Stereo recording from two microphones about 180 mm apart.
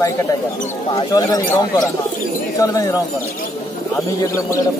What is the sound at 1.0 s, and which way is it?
Speech, 20° left (ahead or behind).